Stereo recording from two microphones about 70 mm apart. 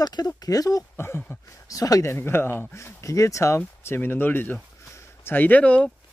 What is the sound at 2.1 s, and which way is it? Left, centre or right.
Speech, left.